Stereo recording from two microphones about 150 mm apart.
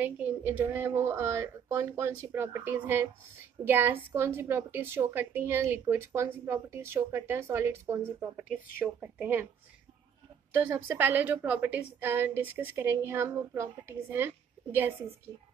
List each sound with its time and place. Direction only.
0.0 s a woman's voice: 10° right (ahead or behind)
10.6 s a woman's voice: 15° right (ahead or behind)